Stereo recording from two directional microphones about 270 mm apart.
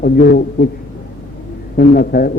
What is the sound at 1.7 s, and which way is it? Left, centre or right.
Speech, left.